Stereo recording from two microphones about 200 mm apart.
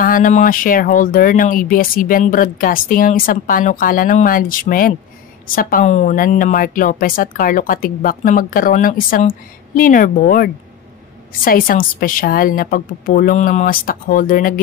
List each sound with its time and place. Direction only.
0.0 s speech: 45° left (ahead or behind)